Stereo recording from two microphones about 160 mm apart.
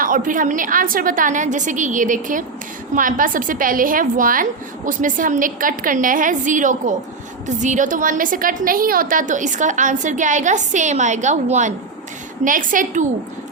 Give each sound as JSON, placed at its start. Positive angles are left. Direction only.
{"t": 0.0, "sound": "a woman's voice", "side_deg": -55}